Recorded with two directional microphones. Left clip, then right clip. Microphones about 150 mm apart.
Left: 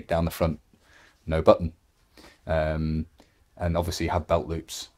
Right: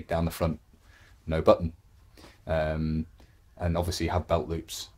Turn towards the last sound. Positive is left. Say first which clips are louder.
# left 2 dB
turn(degrees=40)  # may be behind; listen again after turning